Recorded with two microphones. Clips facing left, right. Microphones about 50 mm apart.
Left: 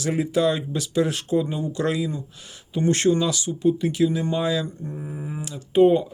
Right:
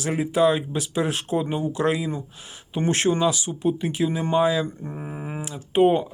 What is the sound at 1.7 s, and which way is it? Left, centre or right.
Speech, right.